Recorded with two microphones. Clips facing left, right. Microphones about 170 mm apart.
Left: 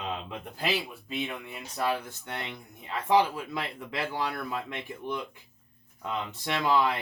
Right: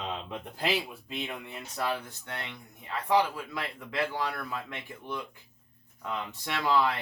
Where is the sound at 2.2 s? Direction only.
20° left (ahead or behind).